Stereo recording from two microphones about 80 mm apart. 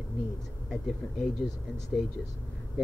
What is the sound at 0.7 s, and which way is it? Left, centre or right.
Speech, centre.